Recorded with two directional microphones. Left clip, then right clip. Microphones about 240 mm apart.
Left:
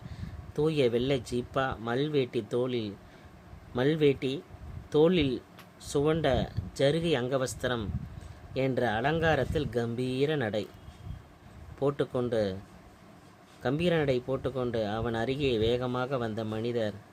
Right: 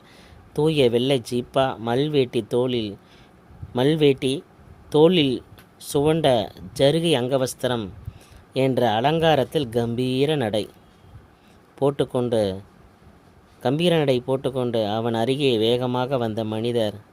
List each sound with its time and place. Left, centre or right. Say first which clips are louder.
0.5 s speech: right 8 dB; right
11.8 s speech: right 8 dB; right
13.6 s speech: right 8 dB; right